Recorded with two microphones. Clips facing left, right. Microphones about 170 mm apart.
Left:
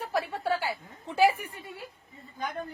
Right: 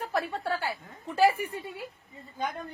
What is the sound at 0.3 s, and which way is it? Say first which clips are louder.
Speech: left 2 dB; 20° left (ahead or behind).